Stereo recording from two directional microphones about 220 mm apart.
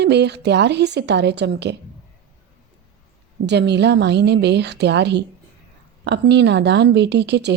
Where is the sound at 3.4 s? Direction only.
50° right (ahead or behind).